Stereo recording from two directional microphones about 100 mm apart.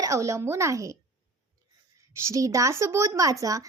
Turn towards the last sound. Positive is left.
turn(degrees=-35)  # may be behind; listen again after turning